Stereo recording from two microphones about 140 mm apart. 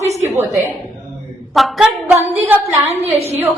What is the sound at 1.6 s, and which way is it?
Speech, 5° right (ahead or behind).